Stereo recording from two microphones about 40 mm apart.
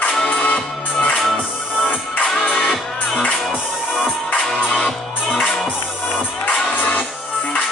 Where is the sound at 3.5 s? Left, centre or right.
Centre.